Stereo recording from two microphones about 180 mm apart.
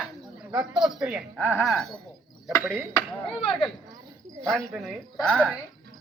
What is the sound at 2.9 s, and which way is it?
Speech, 30° left (ahead or behind).